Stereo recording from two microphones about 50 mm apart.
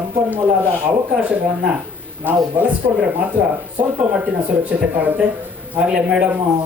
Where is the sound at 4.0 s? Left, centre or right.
Right.